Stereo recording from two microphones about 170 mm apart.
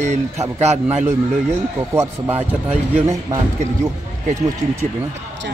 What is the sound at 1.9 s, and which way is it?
Speech, 15° right (ahead or behind).